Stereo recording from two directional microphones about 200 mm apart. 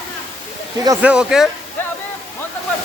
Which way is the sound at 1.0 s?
5° right (ahead or behind).